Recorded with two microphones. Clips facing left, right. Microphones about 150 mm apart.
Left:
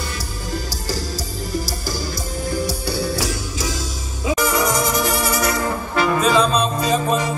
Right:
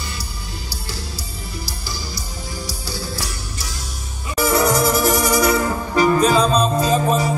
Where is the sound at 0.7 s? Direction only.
40° left (ahead or behind); by 4.4 s 90° left.